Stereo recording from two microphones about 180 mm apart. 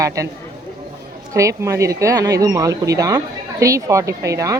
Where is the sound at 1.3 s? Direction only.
15° right (ahead or behind).